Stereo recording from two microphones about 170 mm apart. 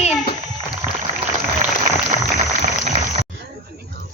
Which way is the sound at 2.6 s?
40° right (ahead or behind).